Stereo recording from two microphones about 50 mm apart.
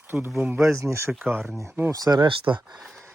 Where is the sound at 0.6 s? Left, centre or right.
Right.